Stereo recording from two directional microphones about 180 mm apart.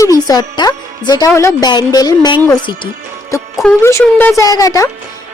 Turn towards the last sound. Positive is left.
turn(degrees=20)  # may be behind; listen again after turning